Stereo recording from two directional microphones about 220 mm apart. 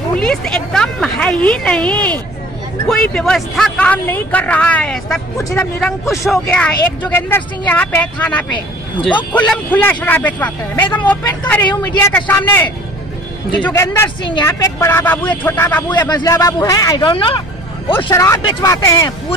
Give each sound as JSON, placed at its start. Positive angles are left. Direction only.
{"t": 0.1, "sound": "speech", "side_deg": 5}